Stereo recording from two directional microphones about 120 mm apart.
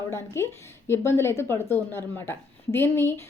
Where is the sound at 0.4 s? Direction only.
20° left (ahead or behind).